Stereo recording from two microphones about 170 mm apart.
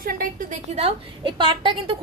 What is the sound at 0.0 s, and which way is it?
A woman's voice, 55° right (ahead or behind).